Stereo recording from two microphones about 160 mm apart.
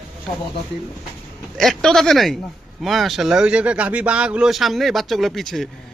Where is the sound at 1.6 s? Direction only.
5° left (ahead or behind).